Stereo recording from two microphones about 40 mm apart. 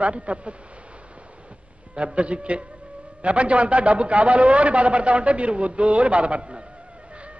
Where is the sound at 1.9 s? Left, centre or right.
Right.